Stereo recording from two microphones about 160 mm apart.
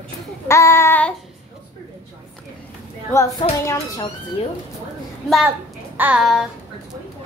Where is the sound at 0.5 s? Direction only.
15° left (ahead or behind).